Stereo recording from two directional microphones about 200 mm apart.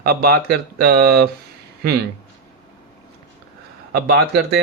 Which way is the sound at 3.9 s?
50° right (ahead or behind).